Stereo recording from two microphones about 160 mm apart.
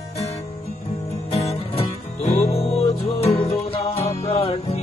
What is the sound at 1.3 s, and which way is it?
Music, 35° left (ahead or behind).